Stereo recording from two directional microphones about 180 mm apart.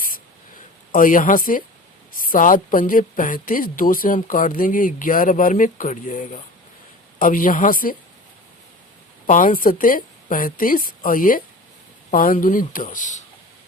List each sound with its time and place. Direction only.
0.9 s a woman's voice: 50° left (ahead or behind)
9.2 s a woman's voice: 50° left (ahead or behind)